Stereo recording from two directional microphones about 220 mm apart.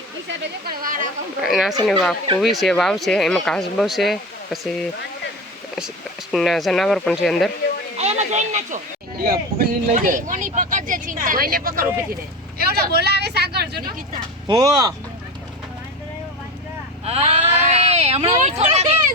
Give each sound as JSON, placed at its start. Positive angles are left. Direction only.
{"t": 1.4, "sound": "speech", "side_deg": 0}
{"t": 6.3, "sound": "speech", "side_deg": 0}
{"t": 7.9, "sound": "speech", "side_deg": -30}
{"t": 14.4, "sound": "speech", "side_deg": -20}
{"t": 17.1, "sound": "speech", "side_deg": -30}